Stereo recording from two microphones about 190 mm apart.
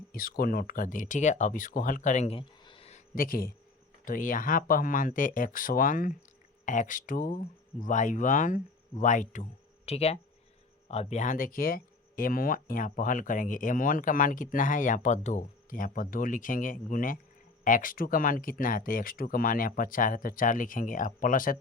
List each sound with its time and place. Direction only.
0.1 s speech: 50° left (ahead or behind); by 3.0 s 30° left (ahead or behind)
3.2 s speech: 50° left (ahead or behind)